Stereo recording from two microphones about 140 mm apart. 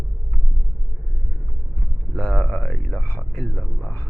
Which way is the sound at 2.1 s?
10° left (ahead or behind).